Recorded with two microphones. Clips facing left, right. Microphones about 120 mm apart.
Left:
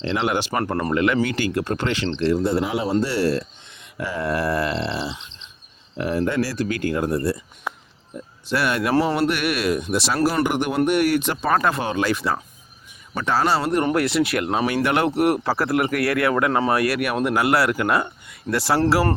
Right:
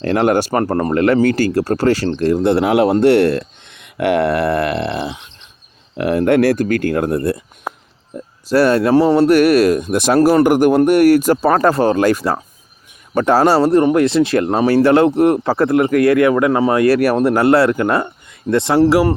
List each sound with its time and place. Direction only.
0.0 s speech: 50° right (ahead or behind)
2.4 s speech: 70° right (ahead or behind); by 5.5 s 55° right (ahead or behind)
6.0 s speech: 70° right (ahead or behind)
7.7 s a sound: 40° right (ahead or behind)
8.4 s speech: 35° right (ahead or behind)
13.8 s speech: 25° right (ahead or behind)
18.8 s speech: 15° right (ahead or behind)